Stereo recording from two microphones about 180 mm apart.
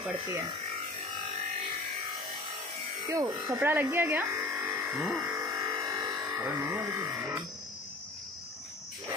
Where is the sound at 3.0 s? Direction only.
20° right (ahead or behind).